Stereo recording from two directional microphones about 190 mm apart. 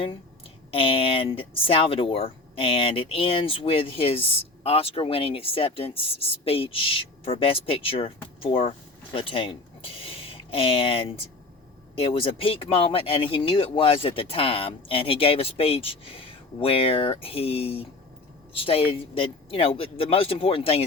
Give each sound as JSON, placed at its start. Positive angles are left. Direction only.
{"t": 0.7, "sound": "speech", "side_deg": 30}